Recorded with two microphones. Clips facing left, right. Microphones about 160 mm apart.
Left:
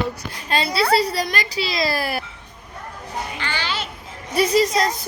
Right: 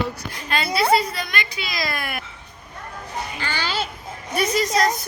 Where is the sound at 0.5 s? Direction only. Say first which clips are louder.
Even; 35° left (ahead or behind).